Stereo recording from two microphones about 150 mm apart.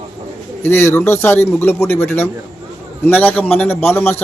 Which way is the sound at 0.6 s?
15° left (ahead or behind).